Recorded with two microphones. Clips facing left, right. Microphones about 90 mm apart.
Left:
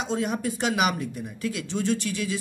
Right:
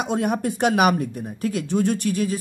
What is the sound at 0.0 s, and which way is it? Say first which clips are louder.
Speech: right 4 dB; 55° right (ahead or behind).